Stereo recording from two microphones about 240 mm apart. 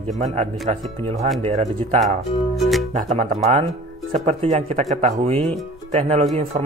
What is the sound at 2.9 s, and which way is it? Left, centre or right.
Speech, right.